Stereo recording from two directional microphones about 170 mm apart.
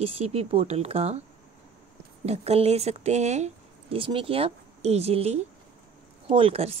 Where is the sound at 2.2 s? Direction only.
40° right (ahead or behind).